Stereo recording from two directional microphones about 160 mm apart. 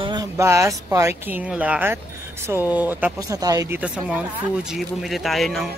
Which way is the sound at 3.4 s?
20° right (ahead or behind).